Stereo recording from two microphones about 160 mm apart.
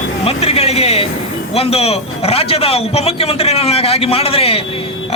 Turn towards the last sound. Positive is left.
turn(degrees=40)  # may be behind; listen again after turning